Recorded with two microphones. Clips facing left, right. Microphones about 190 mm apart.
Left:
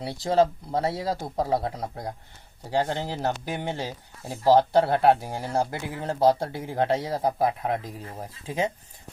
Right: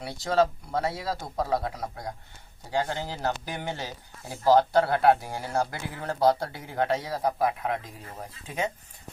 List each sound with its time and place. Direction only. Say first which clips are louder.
0.0 s speech: left 2 dB; 25° left (ahead or behind)